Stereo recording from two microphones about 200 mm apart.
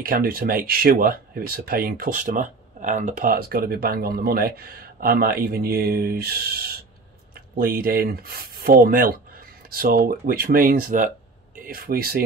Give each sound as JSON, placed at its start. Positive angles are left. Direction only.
{"t": 0.0, "sound": "speech", "side_deg": -45}